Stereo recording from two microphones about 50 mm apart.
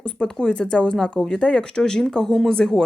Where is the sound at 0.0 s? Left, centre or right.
Centre.